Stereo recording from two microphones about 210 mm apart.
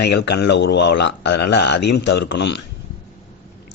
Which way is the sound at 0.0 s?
55° left (ahead or behind).